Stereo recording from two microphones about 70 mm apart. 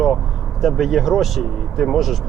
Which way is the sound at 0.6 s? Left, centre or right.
Centre.